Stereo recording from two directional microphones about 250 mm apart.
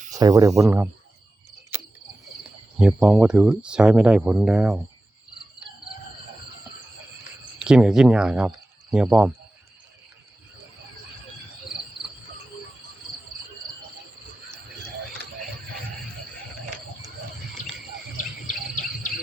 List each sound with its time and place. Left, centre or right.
0.1 s speech: centre
2.7 s speech: centre
7.6 s speech: centre
18.4 s cricket: left